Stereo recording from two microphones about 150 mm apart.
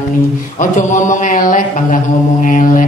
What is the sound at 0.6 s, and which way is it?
A woman's voice, 55° left (ahead or behind).